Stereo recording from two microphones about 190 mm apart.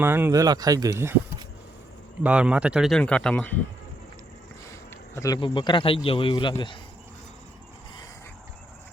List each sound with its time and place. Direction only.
0.0 s speech: 10° right (ahead or behind); by 3.5 s 5° left (ahead or behind)
5.1 s a man's voice: 20° left (ahead or behind)